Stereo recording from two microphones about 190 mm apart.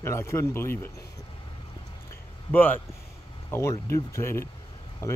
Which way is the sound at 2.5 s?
10° left (ahead or behind).